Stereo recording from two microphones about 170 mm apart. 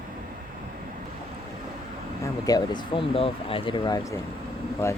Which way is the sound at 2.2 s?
20° left (ahead or behind).